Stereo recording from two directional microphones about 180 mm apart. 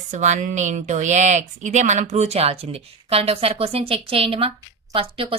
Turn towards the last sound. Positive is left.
turn(degrees=-30)  # may be behind; listen again after turning